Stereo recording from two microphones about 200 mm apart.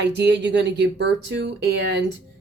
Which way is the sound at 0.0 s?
60° right (ahead or behind).